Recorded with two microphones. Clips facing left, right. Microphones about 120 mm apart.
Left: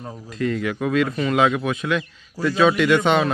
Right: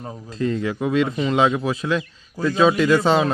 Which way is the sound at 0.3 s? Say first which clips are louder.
Right 1 dB; 30° right (ahead or behind).